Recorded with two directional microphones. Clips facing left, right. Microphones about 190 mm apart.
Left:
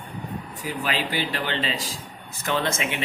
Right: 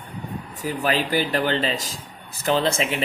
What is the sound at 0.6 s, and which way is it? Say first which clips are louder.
Speech: right 5 dB; 45° right (ahead or behind).